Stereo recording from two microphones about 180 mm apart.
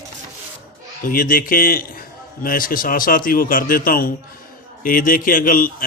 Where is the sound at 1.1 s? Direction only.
50° left (ahead or behind).